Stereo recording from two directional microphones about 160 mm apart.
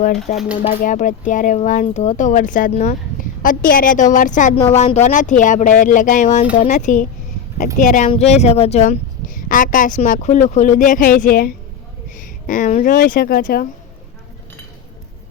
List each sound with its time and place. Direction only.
0.3 s speech: 55° left (ahead or behind)